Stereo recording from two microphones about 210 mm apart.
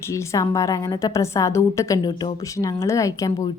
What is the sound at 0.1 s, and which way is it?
A woman's voice, 15° left (ahead or behind).